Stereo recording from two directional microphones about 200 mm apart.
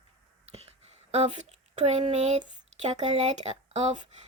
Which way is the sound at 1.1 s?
35° right (ahead or behind).